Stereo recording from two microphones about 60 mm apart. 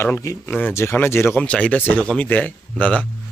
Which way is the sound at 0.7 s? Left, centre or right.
Left.